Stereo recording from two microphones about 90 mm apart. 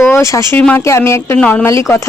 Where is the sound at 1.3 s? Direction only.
15° left (ahead or behind).